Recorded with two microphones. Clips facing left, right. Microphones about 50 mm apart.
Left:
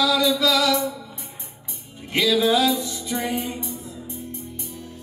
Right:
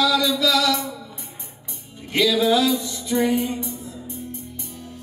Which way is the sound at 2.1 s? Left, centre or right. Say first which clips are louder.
Right 1 dB; centre.